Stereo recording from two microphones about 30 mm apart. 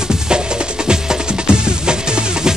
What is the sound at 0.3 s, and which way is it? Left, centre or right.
Music, right.